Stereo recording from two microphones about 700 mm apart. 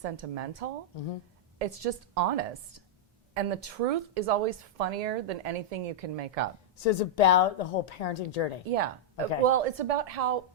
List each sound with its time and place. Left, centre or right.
0.0 s a woman's voice: right
6.8 s a woman's voice: left
8.7 s a woman's voice: right